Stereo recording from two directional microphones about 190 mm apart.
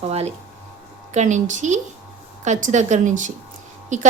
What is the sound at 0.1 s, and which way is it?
A woman's voice, 35° right (ahead or behind).